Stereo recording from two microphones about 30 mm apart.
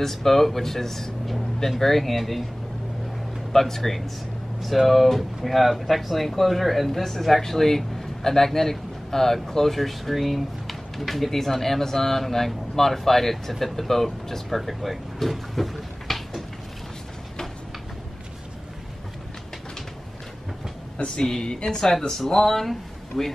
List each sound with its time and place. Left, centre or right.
0.0 s speech: centre
3.5 s a man's voice: centre
21.2 s a woman's voice: left
22.1 s speech: centre